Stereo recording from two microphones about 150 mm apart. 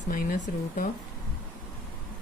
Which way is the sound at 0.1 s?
70° left (ahead or behind).